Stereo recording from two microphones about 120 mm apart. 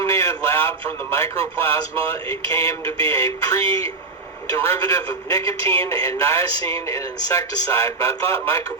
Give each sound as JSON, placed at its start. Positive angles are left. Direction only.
{"t": 0.0, "sound": "speech", "side_deg": 25}